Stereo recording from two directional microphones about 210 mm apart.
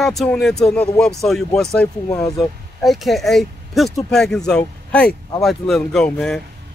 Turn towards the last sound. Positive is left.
turn(degrees=5)  # may be behind; listen again after turning